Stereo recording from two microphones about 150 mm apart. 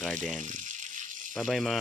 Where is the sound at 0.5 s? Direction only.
60° right (ahead or behind).